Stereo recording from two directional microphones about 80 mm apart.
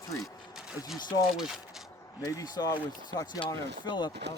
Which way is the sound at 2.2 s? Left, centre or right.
Left.